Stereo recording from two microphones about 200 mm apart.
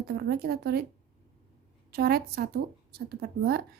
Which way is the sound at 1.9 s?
50° right (ahead or behind).